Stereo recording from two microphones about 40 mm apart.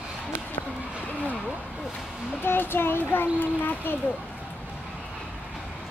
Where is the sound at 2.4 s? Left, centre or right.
Left.